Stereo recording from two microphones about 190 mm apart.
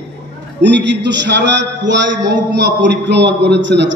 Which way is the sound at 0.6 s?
65° right (ahead or behind).